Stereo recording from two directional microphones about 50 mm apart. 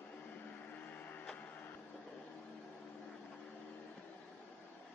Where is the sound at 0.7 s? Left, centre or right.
Left.